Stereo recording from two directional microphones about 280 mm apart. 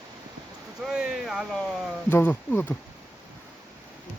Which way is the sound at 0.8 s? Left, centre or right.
Centre.